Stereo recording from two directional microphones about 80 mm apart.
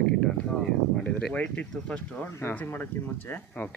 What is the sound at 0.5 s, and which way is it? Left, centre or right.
Speech, left.